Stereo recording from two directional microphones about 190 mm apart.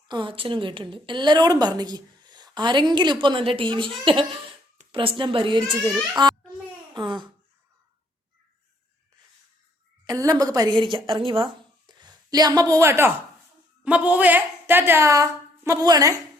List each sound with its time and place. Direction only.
0.1 s a woman's voice: 25° right (ahead or behind)
10.1 s a woman's voice: 20° right (ahead or behind)